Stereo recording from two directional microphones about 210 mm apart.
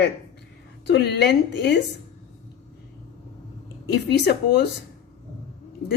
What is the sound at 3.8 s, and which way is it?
Speech, 50° left (ahead or behind).